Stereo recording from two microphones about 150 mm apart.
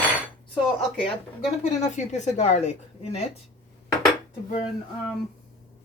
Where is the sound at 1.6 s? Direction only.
50° left (ahead or behind).